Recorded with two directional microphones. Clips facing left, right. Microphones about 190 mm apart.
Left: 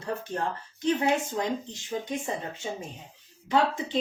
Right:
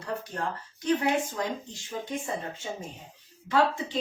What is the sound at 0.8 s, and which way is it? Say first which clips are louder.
Speech: left 1 dB; 25° left (ahead or behind).